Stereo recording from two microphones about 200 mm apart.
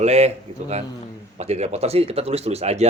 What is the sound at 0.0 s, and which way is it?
Speech, 35° right (ahead or behind).